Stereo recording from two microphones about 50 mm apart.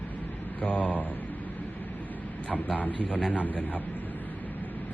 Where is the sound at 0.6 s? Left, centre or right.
Left.